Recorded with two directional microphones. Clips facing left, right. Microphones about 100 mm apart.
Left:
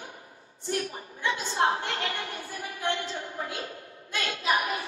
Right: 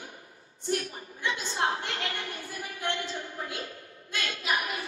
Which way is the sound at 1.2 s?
25° left (ahead or behind).